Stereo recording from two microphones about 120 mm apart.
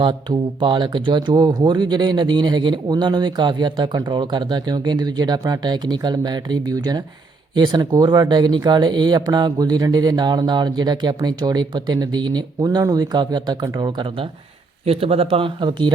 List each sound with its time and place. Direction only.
0.0 s speech: 40° right (ahead or behind)
14.8 s speech: 55° right (ahead or behind)